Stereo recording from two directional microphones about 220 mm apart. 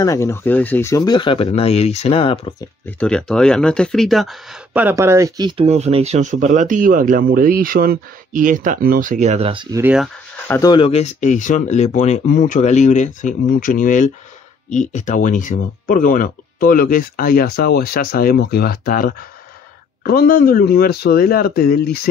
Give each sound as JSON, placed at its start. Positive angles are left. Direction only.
{"t": 0.0, "sound": "speech", "side_deg": 15}
{"t": 3.0, "sound": "speech", "side_deg": 5}
{"t": 10.5, "sound": "speech", "side_deg": 15}